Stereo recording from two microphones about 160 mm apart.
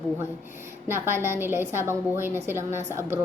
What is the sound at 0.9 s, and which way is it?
A woman's voice, 15° right (ahead or behind).